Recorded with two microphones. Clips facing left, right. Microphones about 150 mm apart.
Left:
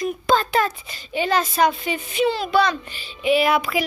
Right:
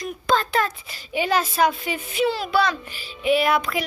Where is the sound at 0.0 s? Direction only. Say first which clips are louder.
Left 3 dB; 5° left (ahead or behind).